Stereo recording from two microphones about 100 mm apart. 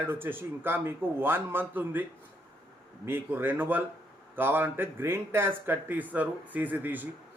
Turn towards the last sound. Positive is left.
turn(degrees=-15)  # may be behind; listen again after turning